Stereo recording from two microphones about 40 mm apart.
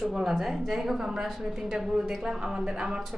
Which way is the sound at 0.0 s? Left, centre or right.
Centre.